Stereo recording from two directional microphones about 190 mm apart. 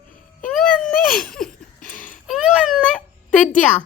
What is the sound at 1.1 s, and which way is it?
Laughter, centre (ahead or behind).